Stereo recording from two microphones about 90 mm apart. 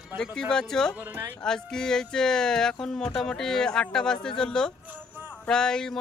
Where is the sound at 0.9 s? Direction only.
15° right (ahead or behind).